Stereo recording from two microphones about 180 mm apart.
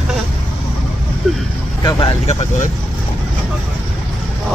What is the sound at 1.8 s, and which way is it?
Speech, 25° left (ahead or behind).